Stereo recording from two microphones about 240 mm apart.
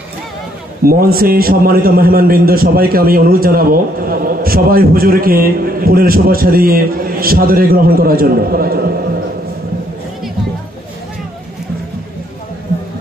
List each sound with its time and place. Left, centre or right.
0.8 s a man's voice: right